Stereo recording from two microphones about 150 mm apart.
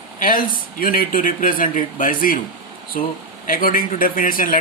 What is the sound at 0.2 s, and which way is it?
Speech, 70° left (ahead or behind).